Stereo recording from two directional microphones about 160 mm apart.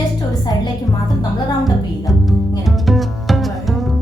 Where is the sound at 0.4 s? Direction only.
25° left (ahead or behind).